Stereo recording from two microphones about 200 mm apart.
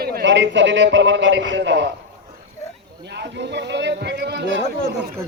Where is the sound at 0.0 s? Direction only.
55° right (ahead or behind).